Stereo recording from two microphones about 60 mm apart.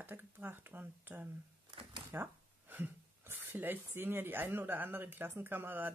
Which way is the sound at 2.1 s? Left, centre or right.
Right.